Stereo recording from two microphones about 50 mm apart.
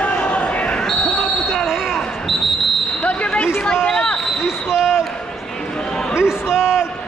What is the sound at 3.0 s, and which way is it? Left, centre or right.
Basketball bounce, left.